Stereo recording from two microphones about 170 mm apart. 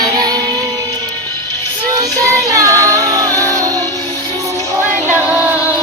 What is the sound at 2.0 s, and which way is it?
Child singing, 20° right (ahead or behind).